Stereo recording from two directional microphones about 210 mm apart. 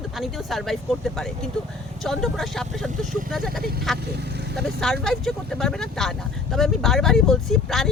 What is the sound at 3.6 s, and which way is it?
Speech, 45° right (ahead or behind).